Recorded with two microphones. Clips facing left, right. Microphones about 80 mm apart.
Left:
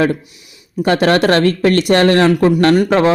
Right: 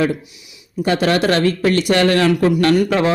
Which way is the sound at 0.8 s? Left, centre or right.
Left.